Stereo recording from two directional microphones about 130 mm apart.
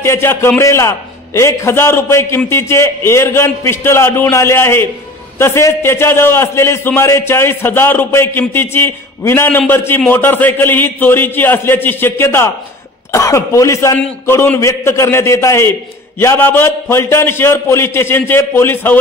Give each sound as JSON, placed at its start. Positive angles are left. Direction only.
{"t": 0.0, "sound": "a man's voice", "side_deg": 20}